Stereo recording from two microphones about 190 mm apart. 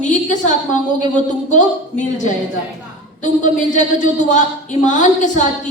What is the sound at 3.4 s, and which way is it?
A woman's voice, 40° left (ahead or behind).